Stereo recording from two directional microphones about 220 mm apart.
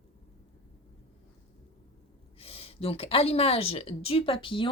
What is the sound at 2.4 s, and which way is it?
A woman's voice, 25° left (ahead or behind).